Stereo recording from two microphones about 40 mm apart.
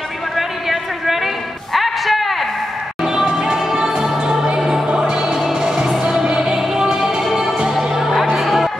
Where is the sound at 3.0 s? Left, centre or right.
Centre.